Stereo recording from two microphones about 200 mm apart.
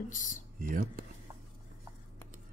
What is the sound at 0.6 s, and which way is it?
Speech, 45° right (ahead or behind).